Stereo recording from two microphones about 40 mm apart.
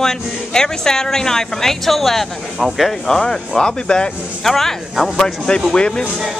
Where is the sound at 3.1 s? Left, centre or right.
Centre.